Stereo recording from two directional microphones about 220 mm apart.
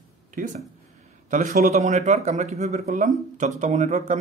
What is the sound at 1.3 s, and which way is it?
Speech, 35° right (ahead or behind).